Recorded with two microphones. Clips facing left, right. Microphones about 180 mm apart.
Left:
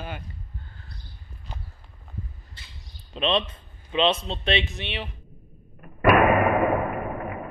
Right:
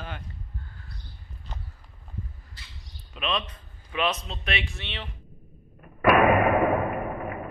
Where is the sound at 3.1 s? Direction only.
30° left (ahead or behind); by 5.1 s 15° left (ahead or behind).